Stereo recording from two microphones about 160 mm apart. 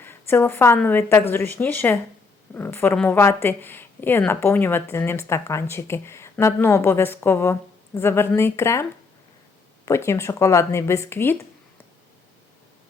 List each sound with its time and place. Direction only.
0.0 s speech: 15° left (ahead or behind)